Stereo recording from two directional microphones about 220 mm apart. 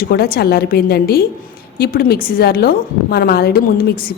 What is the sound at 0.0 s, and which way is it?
A woman's voice, 45° left (ahead or behind).